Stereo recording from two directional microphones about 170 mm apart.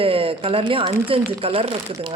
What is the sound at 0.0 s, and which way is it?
Speech, 35° right (ahead or behind).